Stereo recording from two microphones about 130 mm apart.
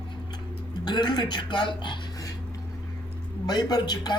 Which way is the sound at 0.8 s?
35° left (ahead or behind).